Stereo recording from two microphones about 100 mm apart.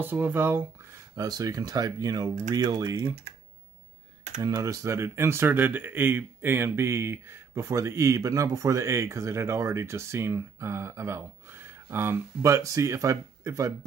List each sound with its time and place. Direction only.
0.0 s speech: 20° right (ahead or behind)
1.1 s speech: 35° right (ahead or behind)
4.4 s speech: 35° right (ahead or behind)